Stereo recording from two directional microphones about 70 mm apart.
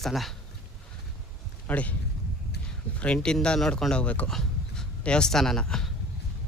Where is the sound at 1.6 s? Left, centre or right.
Left.